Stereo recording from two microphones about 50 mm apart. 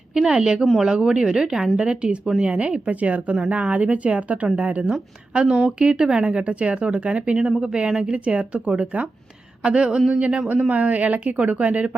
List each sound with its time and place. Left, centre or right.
0.1 s a woman's voice: centre
1.8 s speech: right